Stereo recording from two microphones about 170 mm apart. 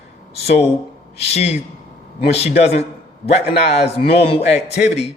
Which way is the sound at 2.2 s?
35° left (ahead or behind).